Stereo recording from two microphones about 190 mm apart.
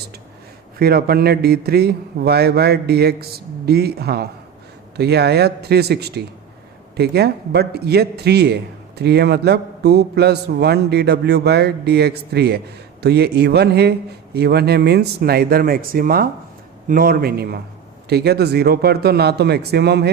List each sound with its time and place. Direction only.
0.8 s a man's voice: 55° right (ahead or behind)